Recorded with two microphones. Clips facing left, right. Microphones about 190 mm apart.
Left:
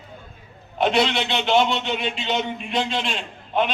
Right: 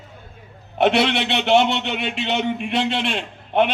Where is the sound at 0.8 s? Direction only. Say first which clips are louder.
Right 3 dB; 65° right (ahead or behind).